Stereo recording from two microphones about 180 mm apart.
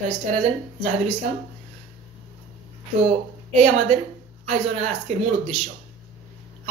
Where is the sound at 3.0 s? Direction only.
35° right (ahead or behind).